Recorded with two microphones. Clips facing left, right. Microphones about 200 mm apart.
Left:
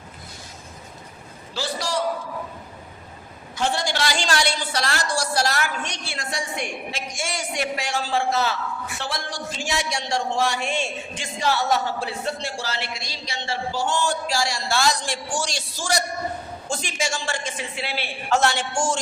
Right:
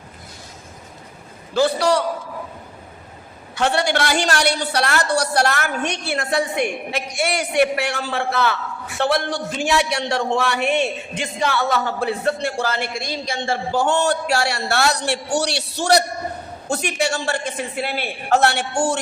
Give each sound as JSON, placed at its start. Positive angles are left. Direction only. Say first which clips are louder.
{"t": 1.5, "sound": "speech", "louder": "right 9 dB", "side_deg": -60}
{"t": 3.5, "sound": "speech", "louder": "right 5 dB", "side_deg": -65}